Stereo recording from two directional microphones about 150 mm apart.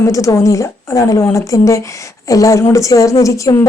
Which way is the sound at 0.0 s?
20° left (ahead or behind).